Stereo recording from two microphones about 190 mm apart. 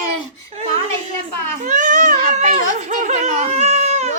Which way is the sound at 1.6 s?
40° right (ahead or behind).